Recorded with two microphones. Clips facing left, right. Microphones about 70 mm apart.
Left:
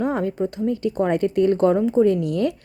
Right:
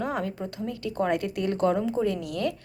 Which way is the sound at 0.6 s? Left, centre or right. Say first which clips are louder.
Left 6 dB; left.